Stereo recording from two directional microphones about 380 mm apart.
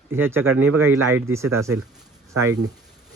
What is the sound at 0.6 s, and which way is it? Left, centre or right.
Speech, right.